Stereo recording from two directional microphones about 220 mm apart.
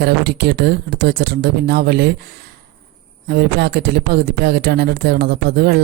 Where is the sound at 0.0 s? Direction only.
50° right (ahead or behind).